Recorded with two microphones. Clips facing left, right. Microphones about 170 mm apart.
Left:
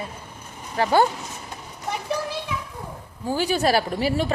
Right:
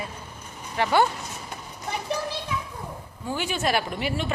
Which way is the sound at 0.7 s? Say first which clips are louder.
Left 2 dB; 40° left (ahead or behind).